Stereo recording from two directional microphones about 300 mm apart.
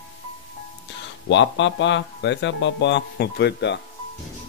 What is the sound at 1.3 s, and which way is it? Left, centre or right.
Speech, left.